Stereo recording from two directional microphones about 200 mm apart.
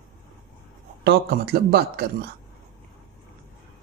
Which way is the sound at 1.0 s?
55° right (ahead or behind).